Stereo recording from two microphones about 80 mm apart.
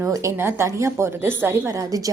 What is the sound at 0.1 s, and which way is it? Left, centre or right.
A woman's voice, right.